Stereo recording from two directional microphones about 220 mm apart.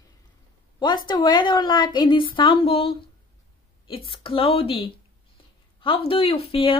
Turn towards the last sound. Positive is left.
turn(degrees=25)  # may be behind; listen again after turning